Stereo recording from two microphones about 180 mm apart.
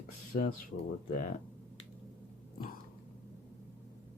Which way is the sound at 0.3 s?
50° left (ahead or behind).